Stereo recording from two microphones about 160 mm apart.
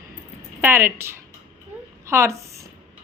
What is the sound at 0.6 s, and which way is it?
Speech, 15° right (ahead or behind).